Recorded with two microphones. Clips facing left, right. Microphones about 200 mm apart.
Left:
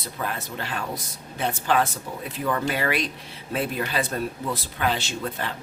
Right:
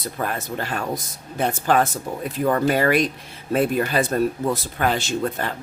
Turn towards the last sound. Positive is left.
turn(degrees=-45)  # may be behind; listen again after turning